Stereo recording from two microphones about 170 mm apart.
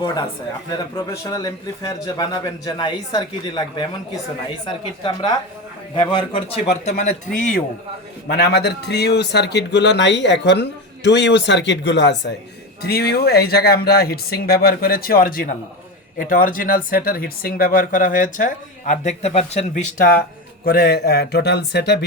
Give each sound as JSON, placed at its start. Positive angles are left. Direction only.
{"t": 0.0, "sound": "a man's voice", "side_deg": 25}
{"t": 6.8, "sound": "speech", "side_deg": 45}
{"t": 8.3, "sound": "speech", "side_deg": 70}
{"t": 12.8, "sound": "a man's voice", "side_deg": 70}